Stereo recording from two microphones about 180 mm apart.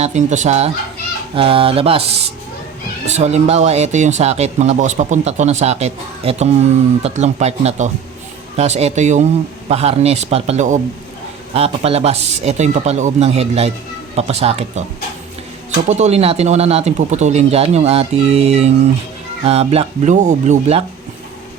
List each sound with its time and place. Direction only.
0.0 s speech: 40° right (ahead or behind)
15.9 s speech: 40° right (ahead or behind)